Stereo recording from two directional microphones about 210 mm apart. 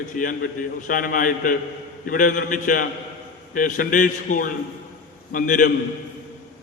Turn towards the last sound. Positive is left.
turn(degrees=40)  # may be behind; listen again after turning